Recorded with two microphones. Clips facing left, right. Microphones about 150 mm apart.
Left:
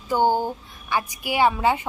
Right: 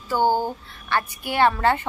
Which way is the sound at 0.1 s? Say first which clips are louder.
Even; 15° left (ahead or behind).